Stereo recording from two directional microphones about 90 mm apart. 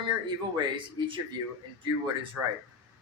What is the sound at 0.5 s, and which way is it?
Speech, 60° right (ahead or behind).